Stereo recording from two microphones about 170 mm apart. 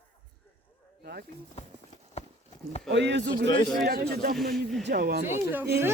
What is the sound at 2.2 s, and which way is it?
Clip-clop, 40° left (ahead or behind).